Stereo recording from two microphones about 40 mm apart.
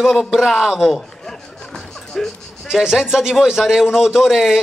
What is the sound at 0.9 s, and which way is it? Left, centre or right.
Music, centre.